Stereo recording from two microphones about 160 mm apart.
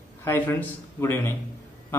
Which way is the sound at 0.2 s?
15° left (ahead or behind).